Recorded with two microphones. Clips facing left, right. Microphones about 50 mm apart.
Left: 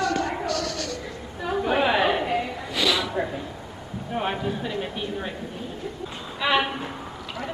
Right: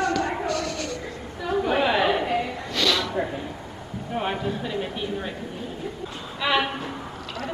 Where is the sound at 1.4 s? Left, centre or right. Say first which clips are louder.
Even; centre.